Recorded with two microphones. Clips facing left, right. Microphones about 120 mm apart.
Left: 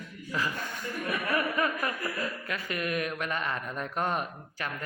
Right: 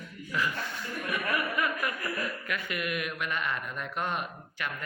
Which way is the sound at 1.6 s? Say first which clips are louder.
Left 1 dB; 30° left (ahead or behind).